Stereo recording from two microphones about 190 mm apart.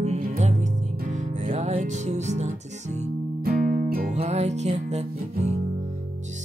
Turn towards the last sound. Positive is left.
turn(degrees=-35)  # may be behind; listen again after turning